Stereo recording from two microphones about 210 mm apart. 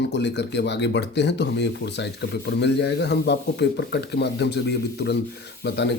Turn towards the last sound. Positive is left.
turn(degrees=55)  # may be behind; listen again after turning